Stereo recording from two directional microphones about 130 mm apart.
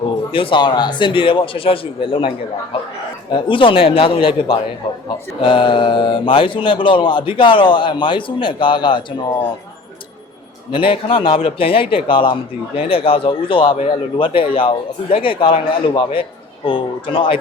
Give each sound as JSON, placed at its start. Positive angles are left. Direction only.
{"t": 0.3, "sound": "speech", "side_deg": 45}
{"t": 3.3, "sound": "a man's voice", "side_deg": 40}
{"t": 10.7, "sound": "a man's voice", "side_deg": 40}